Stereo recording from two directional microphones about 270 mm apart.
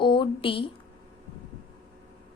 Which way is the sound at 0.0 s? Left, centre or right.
Centre.